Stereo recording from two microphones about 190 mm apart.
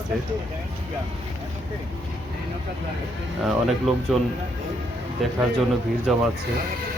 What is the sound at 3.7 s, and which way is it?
Speech, centre (ahead or behind).